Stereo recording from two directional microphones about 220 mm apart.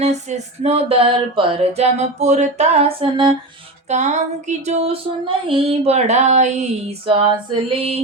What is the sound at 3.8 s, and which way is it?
Female singing, 30° right (ahead or behind).